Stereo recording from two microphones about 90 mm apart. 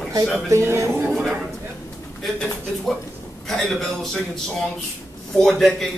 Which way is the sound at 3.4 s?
5° left (ahead or behind).